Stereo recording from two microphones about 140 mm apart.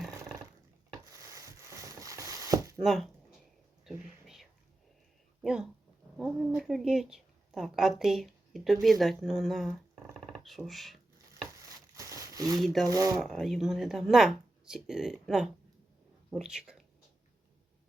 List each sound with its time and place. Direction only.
1.1 s a sound: 20° right (ahead or behind)
2.8 s speech: centre (ahead or behind)
3.8 s whispering: centre (ahead or behind)
5.4 s dog: 5° right (ahead or behind)
6.6 s a woman's voice: centre (ahead or behind)
11.6 s a sound: 25° right (ahead or behind)
12.5 s speech: centre (ahead or behind)
12.9 s speech: 25° right (ahead or behind)
13.1 s speech: centre (ahead or behind)